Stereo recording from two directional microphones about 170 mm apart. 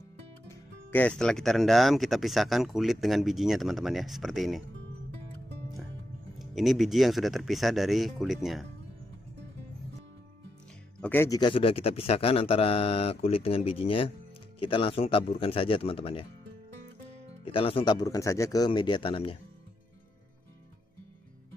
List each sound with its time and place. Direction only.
0.9 s speech: 5° left (ahead or behind)
6.3 s speech: centre (ahead or behind)
11.0 s speech: 10° left (ahead or behind)
11.3 s speech: 30° left (ahead or behind)
17.5 s speech: 30° left (ahead or behind)